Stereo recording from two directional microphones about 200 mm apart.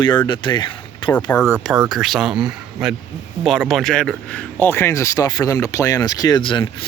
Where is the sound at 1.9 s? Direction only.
Centre (ahead or behind).